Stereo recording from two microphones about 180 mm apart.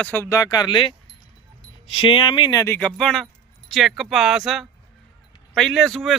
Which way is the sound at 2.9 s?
Centre (ahead or behind).